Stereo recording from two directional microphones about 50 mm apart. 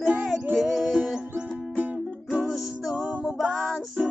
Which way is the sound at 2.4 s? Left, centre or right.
Centre.